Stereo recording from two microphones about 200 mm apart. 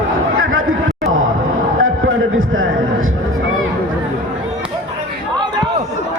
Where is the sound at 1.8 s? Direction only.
85° right.